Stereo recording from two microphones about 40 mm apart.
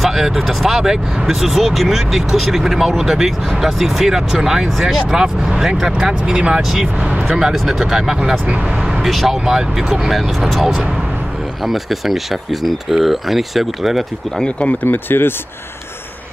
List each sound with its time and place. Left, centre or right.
0.0 s speech: centre
7.5 s speech: centre
8.2 s speech: right
9.0 s speech: centre
9.5 s speech: centre
11.6 s speech: centre
14.9 s speech: left